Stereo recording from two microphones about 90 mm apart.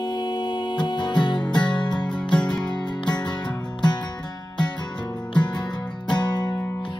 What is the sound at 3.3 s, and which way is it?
Music, 55° left (ahead or behind).